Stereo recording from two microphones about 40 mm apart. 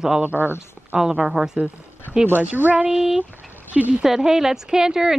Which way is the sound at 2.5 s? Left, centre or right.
Right.